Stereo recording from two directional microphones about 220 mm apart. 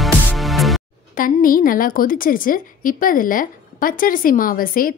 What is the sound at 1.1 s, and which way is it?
A woman's voice, 40° left (ahead or behind).